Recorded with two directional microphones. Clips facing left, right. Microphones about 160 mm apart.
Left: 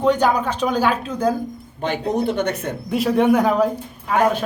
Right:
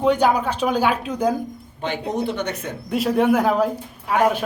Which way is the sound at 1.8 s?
45° left (ahead or behind).